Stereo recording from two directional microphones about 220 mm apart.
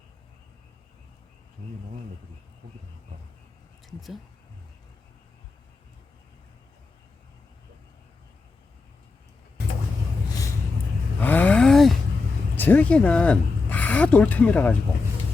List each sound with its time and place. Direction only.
3.8 s speech: centre (ahead or behind)
11.2 s a sound: 10° left (ahead or behind)
12.5 s speech: 10° left (ahead or behind)